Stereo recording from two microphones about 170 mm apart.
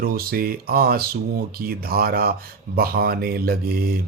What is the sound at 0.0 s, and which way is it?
Speech, 60° right (ahead or behind).